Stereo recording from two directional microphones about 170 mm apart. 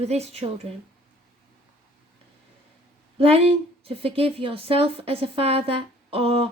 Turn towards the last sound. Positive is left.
turn(degrees=-35)  # may be behind; listen again after turning